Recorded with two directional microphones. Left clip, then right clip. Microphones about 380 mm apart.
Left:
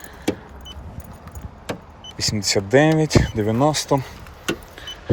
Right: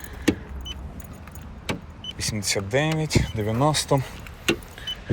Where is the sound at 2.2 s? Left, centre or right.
Centre.